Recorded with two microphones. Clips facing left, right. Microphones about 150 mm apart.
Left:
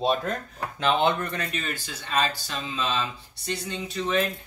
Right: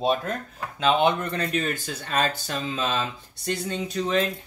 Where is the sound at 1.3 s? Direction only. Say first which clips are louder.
Right 5 dB; 35° right (ahead or behind).